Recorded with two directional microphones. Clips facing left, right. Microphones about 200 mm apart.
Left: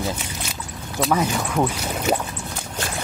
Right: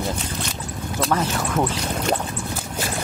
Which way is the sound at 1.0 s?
Centre (ahead or behind).